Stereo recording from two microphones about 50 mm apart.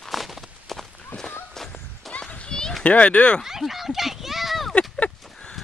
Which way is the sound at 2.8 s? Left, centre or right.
Left.